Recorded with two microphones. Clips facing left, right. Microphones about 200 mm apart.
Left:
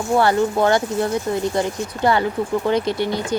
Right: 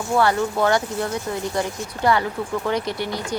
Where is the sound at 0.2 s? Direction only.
30° left (ahead or behind).